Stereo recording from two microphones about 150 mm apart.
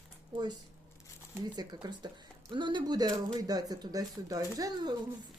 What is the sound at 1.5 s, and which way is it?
Speech, 30° right (ahead or behind).